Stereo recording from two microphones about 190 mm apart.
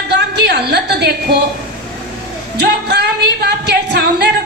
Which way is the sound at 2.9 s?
60° right (ahead or behind).